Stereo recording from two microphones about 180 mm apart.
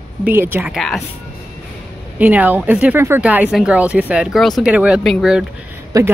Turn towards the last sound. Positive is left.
turn(degrees=-20)  # may be behind; listen again after turning